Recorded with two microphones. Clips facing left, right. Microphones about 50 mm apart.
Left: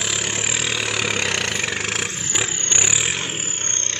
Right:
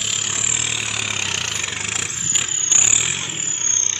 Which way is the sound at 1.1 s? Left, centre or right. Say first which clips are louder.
Left 3 dB; left.